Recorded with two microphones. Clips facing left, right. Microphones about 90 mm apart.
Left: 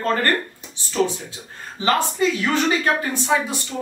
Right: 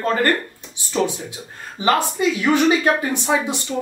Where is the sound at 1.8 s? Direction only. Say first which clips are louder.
Right 1 dB; 15° right (ahead or behind).